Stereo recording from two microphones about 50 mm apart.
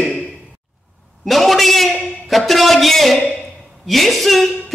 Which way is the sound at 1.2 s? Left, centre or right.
Centre.